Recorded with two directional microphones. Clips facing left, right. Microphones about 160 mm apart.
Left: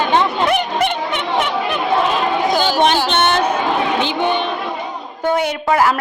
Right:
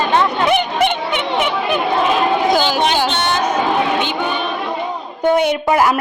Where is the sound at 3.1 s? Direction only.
60° left (ahead or behind).